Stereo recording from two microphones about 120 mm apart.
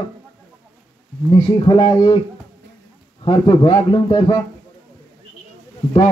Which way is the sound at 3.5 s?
40° left (ahead or behind).